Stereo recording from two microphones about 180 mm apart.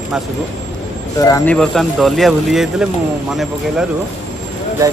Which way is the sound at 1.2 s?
20° left (ahead or behind).